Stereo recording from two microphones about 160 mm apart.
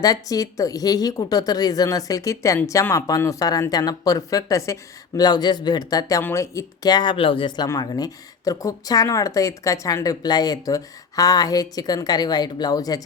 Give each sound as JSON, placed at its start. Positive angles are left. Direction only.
{"t": 0.0, "sound": "speech", "side_deg": 20}